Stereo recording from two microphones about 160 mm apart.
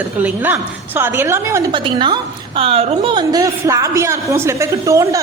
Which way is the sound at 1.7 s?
30° right (ahead or behind).